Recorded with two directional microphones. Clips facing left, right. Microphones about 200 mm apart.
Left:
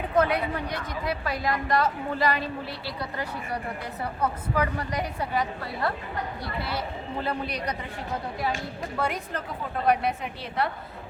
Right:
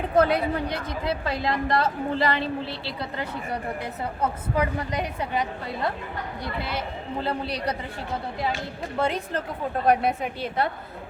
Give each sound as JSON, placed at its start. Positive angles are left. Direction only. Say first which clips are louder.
{"t": 0.2, "sound": "a woman's voice", "louder": "right 3 dB", "side_deg": -30}
{"t": 9.0, "sound": "a woman's voice", "louder": "right 4 dB", "side_deg": -25}
{"t": 9.8, "sound": "a woman's voice", "louder": "right 2 dB", "side_deg": -50}